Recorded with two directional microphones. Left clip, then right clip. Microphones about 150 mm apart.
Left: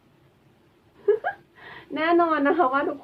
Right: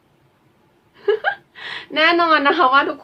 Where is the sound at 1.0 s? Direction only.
25° right (ahead or behind).